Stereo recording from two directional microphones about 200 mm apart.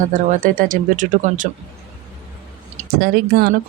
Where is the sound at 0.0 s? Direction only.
40° right (ahead or behind).